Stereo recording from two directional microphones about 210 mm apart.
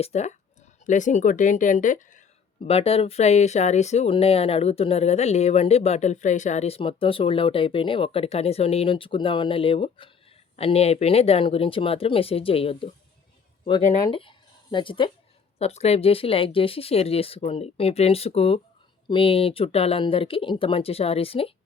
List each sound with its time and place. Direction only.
0.0 s speech: 30° left (ahead or behind)
14.0 s speech: 25° left (ahead or behind)